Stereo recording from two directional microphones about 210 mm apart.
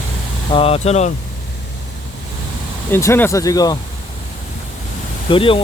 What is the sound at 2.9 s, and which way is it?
Speech, 10° left (ahead or behind).